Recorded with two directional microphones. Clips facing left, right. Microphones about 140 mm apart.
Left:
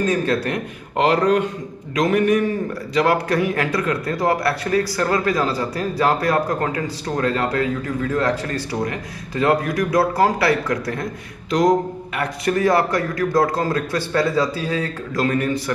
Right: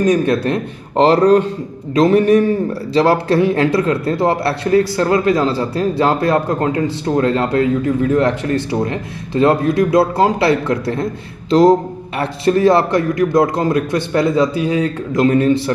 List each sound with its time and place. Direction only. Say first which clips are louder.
0.0 s a man's voice: right 6 dB; 20° right (ahead or behind)